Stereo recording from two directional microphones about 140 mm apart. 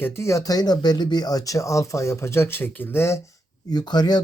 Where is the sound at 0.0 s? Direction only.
20° left (ahead or behind).